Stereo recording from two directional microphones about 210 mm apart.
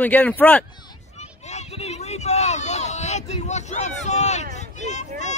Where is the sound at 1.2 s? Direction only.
30° left (ahead or behind).